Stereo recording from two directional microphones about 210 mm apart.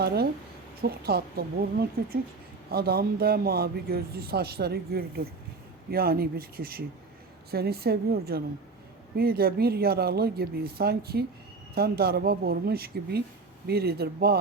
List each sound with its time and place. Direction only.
0.0 s a woman's voice: 50° right (ahead or behind)